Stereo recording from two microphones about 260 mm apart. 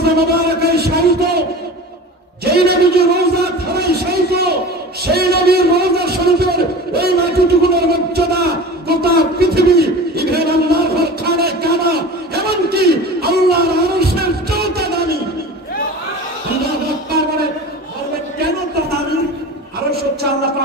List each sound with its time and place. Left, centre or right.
0.0 s a man's voice: right
2.4 s a man's voice: right
11.2 s a sound: right